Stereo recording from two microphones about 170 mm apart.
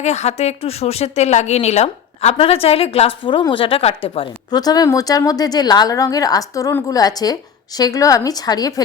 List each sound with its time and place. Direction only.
0.0 s a woman's voice: 40° left (ahead or behind); by 8.8 s 20° left (ahead or behind)